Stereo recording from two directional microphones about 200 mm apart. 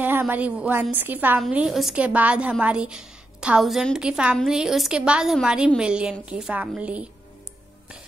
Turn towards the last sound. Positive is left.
turn(degrees=-5)  # may be behind; listen again after turning